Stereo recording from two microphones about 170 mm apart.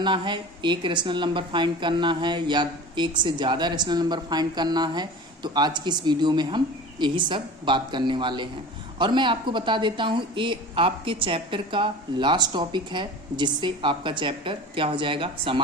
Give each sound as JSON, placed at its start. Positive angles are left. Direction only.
{"t": 0.0, "sound": "a woman's voice", "side_deg": -30}